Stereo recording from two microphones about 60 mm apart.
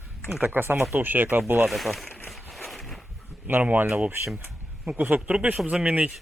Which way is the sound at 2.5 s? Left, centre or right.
Centre.